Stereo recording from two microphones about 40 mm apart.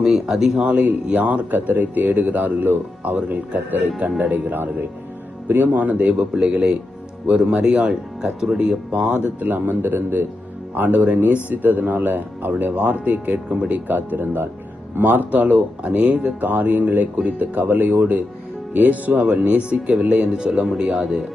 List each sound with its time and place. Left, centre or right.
0.0 s speech: centre
0.6 s speech: right
1.5 s speech: right
5.7 s speech: right
9.0 s speech: right
10.8 s speech: right
11.4 s speech: right
19.3 s speech: right